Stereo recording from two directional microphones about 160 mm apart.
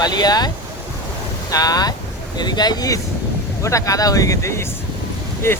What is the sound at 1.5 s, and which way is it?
Speech, 25° left (ahead or behind).